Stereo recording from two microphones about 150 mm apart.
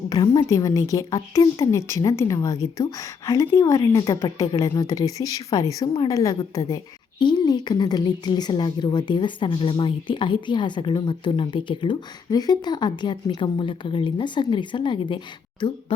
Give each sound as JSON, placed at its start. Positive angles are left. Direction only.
{"t": 0.1, "sound": "a woman's voice", "side_deg": 25}